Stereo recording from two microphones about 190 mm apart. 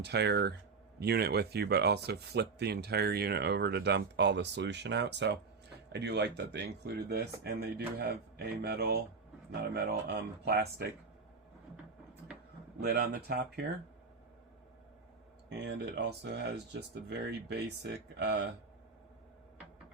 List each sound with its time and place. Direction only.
0.0 s speech: 60° right (ahead or behind)
12.8 s speech: 55° right (ahead or behind)
15.4 s speech: 65° right (ahead or behind)